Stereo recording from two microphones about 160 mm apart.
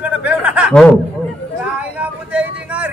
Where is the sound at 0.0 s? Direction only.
10° right (ahead or behind).